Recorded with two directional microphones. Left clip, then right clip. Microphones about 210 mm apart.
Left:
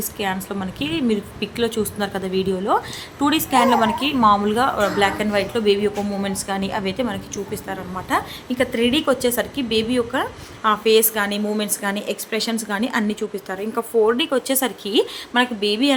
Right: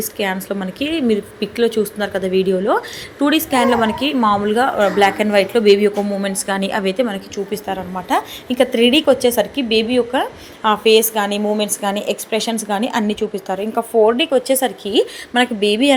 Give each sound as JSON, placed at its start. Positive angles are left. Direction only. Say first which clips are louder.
{"t": 0.2, "sound": "a woman's voice", "louder": "right 4 dB", "side_deg": -10}